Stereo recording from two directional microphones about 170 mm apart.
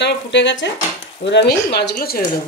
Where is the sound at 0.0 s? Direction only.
90° left.